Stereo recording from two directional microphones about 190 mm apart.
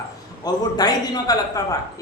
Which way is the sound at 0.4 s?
20° left (ahead or behind).